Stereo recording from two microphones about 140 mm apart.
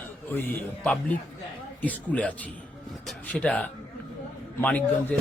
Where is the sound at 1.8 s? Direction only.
10° left (ahead or behind).